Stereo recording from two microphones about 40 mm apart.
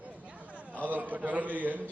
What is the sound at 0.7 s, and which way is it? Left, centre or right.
A man's voice, right.